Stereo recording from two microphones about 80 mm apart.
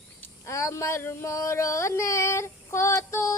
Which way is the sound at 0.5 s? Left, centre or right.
Left.